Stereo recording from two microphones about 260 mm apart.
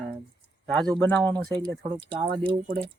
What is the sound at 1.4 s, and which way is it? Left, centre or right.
Speech, centre.